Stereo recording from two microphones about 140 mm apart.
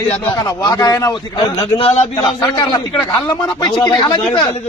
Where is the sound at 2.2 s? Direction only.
30° left (ahead or behind).